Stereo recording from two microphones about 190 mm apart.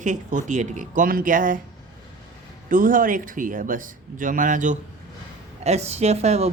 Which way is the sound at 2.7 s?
45° right (ahead or behind).